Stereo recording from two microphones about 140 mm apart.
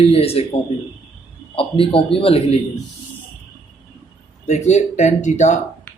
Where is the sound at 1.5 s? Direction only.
40° left (ahead or behind).